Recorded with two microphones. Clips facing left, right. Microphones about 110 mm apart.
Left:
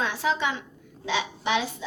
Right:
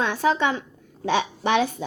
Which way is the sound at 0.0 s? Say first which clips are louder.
Right 5 dB; 50° right (ahead or behind).